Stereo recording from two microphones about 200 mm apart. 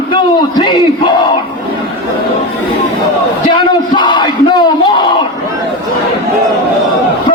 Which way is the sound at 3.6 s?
20° left (ahead or behind).